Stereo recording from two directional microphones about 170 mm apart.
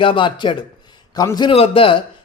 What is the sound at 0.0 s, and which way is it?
A man's voice, 30° left (ahead or behind).